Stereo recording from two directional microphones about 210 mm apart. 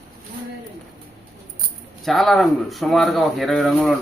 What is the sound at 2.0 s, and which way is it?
Speech, centre (ahead or behind).